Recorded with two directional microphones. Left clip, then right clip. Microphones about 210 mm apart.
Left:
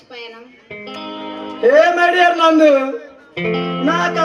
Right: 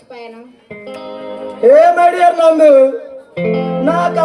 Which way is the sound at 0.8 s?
65° right (ahead or behind).